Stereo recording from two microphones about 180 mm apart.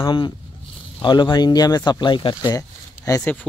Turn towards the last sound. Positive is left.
turn(degrees=10)  # may be behind; listen again after turning